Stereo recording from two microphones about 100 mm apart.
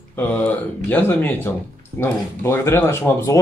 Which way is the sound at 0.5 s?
15° left (ahead or behind).